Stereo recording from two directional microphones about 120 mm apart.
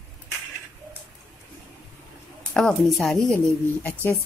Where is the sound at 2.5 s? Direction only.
5° left (ahead or behind).